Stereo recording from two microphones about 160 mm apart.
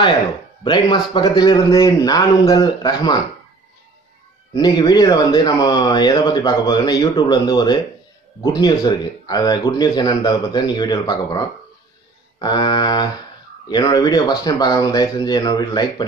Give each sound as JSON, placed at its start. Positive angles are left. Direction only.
{"t": 0.7, "sound": "speech", "side_deg": 25}
{"t": 4.6, "sound": "speech", "side_deg": 25}